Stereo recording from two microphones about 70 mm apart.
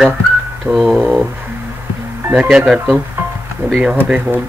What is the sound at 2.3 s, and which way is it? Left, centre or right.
Speech, centre.